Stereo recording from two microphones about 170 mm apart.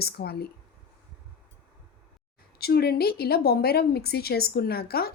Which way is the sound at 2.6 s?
65° left (ahead or behind).